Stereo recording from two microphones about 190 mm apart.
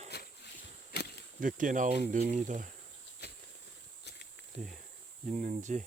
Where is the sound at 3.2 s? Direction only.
60° left (ahead or behind).